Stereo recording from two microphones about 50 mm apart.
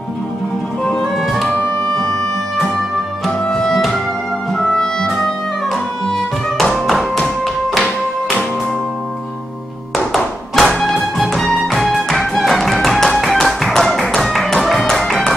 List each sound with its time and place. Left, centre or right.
1.1 s music: centre
3.3 s music: centre
7.8 s music: centre
9.9 s music: centre
11.6 s music: centre